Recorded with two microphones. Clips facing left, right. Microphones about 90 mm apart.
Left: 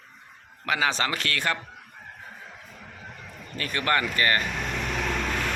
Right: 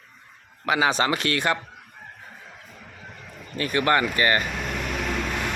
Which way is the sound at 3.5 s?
10° right (ahead or behind).